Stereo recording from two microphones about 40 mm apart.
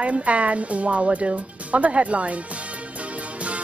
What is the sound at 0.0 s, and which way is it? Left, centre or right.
Speech, right.